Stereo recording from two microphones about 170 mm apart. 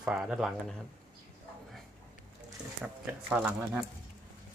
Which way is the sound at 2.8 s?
5° right (ahead or behind).